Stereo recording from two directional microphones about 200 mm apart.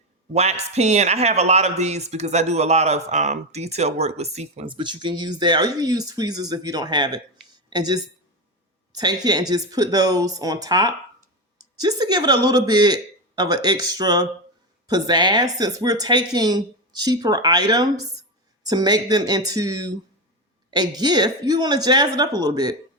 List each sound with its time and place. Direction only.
0.3 s speech: 35° right (ahead or behind)